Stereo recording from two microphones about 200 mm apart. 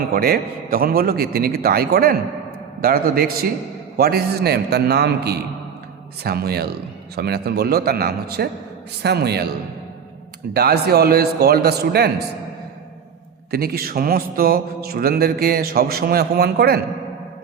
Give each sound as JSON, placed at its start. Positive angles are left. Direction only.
{"t": 0.1, "sound": "mantra", "side_deg": -50}
{"t": 9.0, "sound": "a man's voice", "side_deg": -55}
{"t": 10.5, "sound": "mantra", "side_deg": -50}
{"t": 13.5, "sound": "mantra", "side_deg": -50}